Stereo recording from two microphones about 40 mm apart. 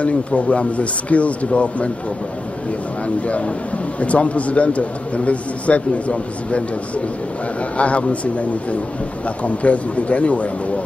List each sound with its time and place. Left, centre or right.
0.0 s a man's voice: left
3.3 s a man's voice: left
7.7 s a man's voice: left